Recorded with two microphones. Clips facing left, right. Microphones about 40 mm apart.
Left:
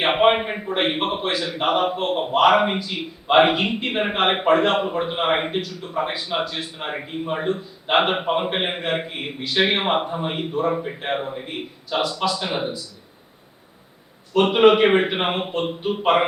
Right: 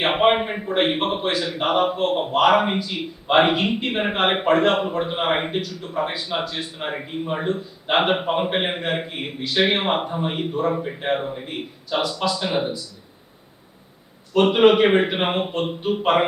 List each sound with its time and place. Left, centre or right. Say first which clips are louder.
0.0 s a man's voice: left 1 dB; centre
14.3 s a man's voice: even; centre